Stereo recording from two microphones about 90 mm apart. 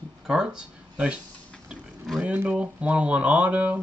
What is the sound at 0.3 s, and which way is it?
Speech, 10° right (ahead or behind).